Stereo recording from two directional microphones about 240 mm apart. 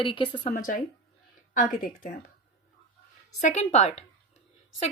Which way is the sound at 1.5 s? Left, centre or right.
Left.